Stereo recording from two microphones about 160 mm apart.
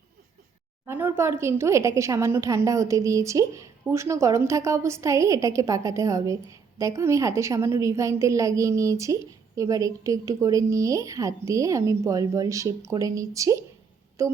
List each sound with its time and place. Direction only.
0.9 s a woman's voice: 15° right (ahead or behind)